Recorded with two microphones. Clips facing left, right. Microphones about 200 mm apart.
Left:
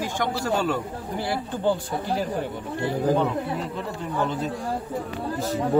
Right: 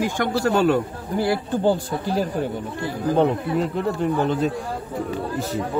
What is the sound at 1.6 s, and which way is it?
Speech, 40° right (ahead or behind).